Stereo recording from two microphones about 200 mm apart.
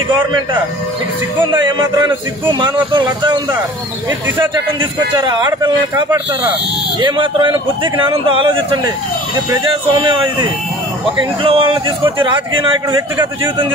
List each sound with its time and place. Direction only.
1.4 s a man's voice: 25° right (ahead or behind)
5.1 s a man's voice: 20° right (ahead or behind)